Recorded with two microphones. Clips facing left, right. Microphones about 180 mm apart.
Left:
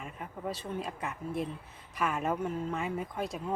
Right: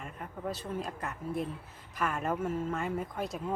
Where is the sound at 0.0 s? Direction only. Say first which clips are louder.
Even; centre (ahead or behind).